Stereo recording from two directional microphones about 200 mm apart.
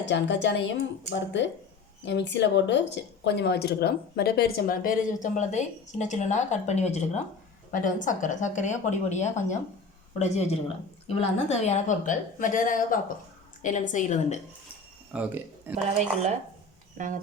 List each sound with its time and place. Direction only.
0.0 s a woman's voice: 60° left (ahead or behind); by 14.3 s 35° left (ahead or behind)
15.1 s speech: 10° right (ahead or behind)
15.7 s speech: 35° right (ahead or behind)